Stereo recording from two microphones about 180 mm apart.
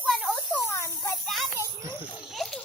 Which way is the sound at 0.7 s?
15° left (ahead or behind).